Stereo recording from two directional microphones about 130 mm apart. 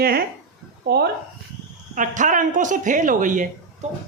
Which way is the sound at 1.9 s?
75° right (ahead or behind).